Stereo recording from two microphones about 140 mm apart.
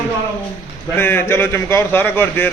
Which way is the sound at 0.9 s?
15° left (ahead or behind).